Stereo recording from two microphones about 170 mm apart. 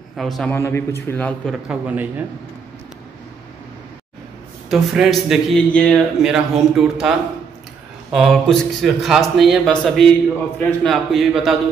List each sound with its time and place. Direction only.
0.2 s speech: 5° left (ahead or behind)
0.6 s a man's voice: 15° left (ahead or behind)
1.5 s a man's voice: 5° right (ahead or behind)
4.6 s speech: centre (ahead or behind)